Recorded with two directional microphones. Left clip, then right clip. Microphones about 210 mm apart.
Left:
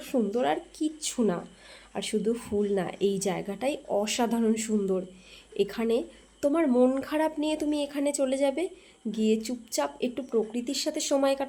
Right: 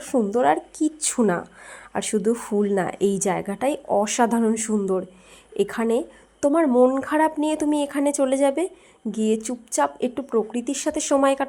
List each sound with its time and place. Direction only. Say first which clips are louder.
0.3 s a woman's voice: right 8 dB; 15° right (ahead or behind)